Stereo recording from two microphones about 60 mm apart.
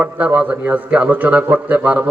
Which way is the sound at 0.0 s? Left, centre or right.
Right.